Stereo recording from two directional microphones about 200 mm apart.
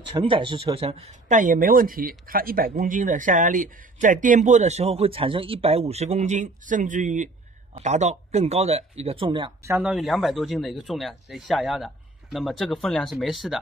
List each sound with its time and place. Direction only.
0.1 s speech: 25° right (ahead or behind)
9.7 s speech: 5° right (ahead or behind)